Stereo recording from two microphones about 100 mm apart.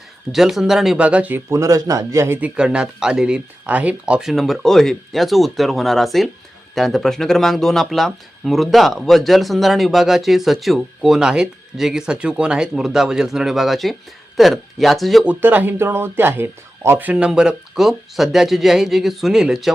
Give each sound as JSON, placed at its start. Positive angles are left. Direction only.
{"t": 0.3, "sound": "speech", "side_deg": -5}
{"t": 1.5, "sound": "a man's voice", "side_deg": -30}
{"t": 2.4, "sound": "speech", "side_deg": -10}
{"t": 15.2, "sound": "speech", "side_deg": -15}